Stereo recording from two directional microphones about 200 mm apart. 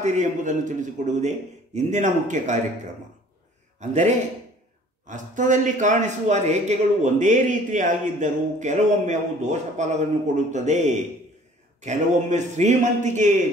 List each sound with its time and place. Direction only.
0.0 s a man's voice: 35° right (ahead or behind)
5.0 s a man's voice: 40° right (ahead or behind)